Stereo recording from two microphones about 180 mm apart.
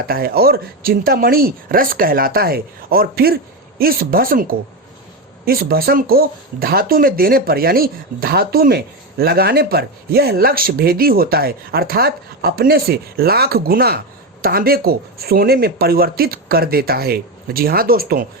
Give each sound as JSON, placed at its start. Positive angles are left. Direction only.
{"t": 0.1, "sound": "speech", "side_deg": -55}